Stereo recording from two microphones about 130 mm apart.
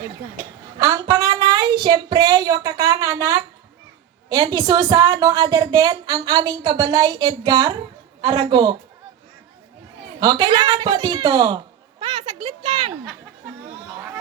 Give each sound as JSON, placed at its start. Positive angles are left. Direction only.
{"t": 0.8, "sound": "a woman's voice", "side_deg": -25}
{"t": 10.2, "sound": "a woman's voice", "side_deg": -30}
{"t": 11.9, "sound": "speech", "side_deg": -55}